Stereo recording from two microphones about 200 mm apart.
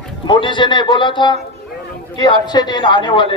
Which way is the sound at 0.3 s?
25° left (ahead or behind).